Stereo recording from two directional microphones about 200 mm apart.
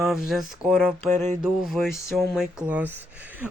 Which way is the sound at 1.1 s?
35° right (ahead or behind).